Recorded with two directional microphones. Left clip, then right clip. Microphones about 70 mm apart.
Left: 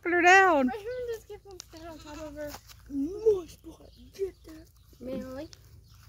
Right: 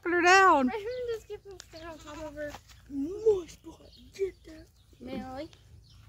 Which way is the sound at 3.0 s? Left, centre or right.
Left.